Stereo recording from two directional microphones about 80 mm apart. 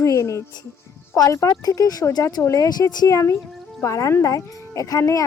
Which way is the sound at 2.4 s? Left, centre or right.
Left.